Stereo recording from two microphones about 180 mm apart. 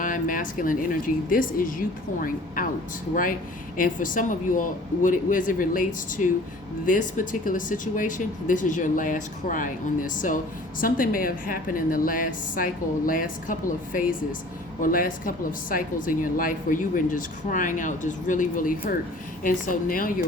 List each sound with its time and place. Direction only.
0.0 s speech: 50° left (ahead or behind)
3.8 s speech: 50° left (ahead or behind)